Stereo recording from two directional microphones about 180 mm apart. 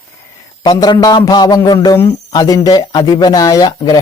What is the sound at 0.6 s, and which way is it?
A man's voice, 20° left (ahead or behind).